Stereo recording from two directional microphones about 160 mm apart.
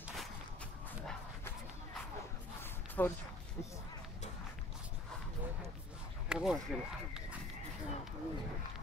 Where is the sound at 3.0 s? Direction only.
15° left (ahead or behind).